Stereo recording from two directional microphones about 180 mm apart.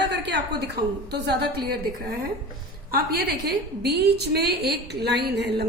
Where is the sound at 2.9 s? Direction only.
60° right (ahead or behind).